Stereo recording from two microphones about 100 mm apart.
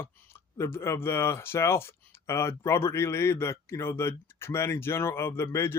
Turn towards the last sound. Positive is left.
turn(degrees=25)  # may be behind; listen again after turning